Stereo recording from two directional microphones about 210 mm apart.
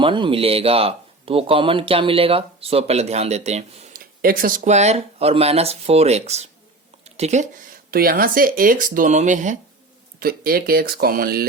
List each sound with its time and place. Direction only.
0.0 s speech: 25° right (ahead or behind)
7.9 s speech: 45° right (ahead or behind)